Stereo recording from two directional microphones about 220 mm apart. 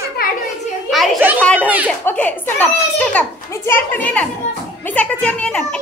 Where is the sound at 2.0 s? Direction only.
10° left (ahead or behind).